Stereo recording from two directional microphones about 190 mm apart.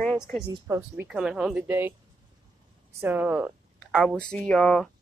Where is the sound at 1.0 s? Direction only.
5° right (ahead or behind).